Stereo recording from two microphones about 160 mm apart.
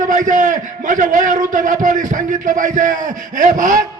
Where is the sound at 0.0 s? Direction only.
55° right (ahead or behind).